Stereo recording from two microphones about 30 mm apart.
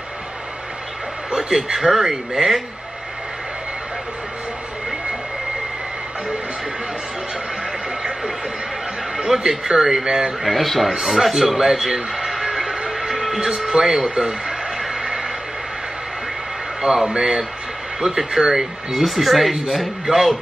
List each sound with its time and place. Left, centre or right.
1.3 s a man's voice: right
9.3 s speech: centre
10.4 s speech: centre
11.1 s speech: centre
12.2 s music: centre
13.7 s speech: right
14.8 s a sound: centre
16.8 s speech: right
18.9 s speech: centre
20.1 s speech: right